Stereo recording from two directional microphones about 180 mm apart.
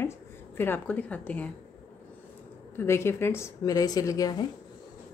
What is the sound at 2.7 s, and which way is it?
A woman's voice, 15° left (ahead or behind).